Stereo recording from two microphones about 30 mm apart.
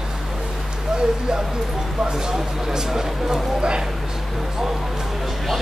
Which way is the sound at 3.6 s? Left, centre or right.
Right.